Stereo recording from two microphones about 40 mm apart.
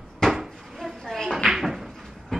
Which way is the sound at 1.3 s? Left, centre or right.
Centre.